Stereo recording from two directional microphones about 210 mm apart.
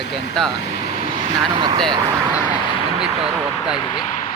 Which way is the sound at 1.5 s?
20° right (ahead or behind).